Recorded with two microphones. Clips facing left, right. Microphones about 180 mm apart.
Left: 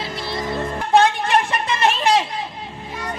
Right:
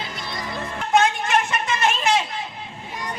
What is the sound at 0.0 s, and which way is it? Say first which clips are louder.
Music: left 5 dB; 30° left (ahead or behind).